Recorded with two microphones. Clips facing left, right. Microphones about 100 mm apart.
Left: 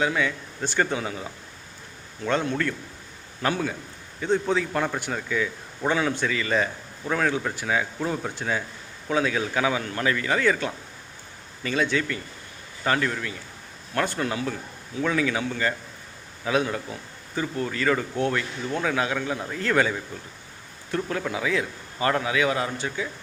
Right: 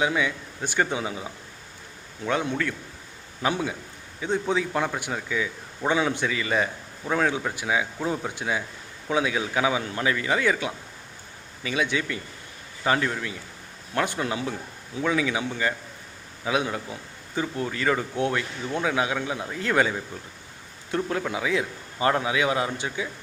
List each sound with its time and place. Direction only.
0.0 s a man's voice: 10° right (ahead or behind)